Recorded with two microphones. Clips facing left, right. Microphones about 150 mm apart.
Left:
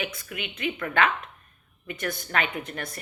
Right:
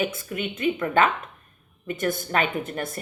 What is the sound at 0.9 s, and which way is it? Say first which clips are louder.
A woman's voice: right 3 dB; 40° right (ahead or behind).